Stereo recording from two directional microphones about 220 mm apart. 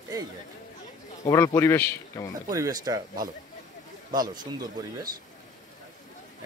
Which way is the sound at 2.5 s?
15° right (ahead or behind).